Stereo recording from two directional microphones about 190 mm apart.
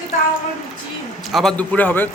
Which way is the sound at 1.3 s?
Centre (ahead or behind).